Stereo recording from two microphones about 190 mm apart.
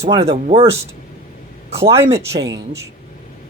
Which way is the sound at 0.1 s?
35° right (ahead or behind).